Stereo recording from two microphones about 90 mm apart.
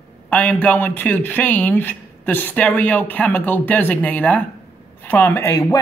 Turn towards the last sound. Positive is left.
turn(degrees=30)  # may be behind; listen again after turning